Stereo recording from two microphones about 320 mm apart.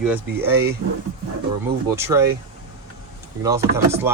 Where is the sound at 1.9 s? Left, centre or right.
Centre.